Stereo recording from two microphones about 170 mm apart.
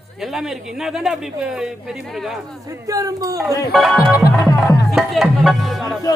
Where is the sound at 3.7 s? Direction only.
Centre (ahead or behind).